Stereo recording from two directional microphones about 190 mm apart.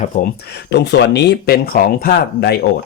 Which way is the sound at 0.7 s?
60° left (ahead or behind).